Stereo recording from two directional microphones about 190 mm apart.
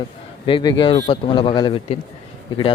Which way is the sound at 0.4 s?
25° left (ahead or behind).